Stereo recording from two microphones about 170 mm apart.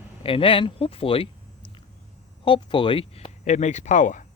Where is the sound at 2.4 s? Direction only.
30° left (ahead or behind); by 4.2 s 50° left (ahead or behind).